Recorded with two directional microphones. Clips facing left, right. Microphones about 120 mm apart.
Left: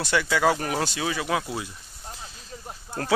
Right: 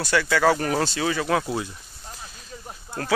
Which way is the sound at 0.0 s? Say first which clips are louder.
Right 2 dB; 20° left (ahead or behind).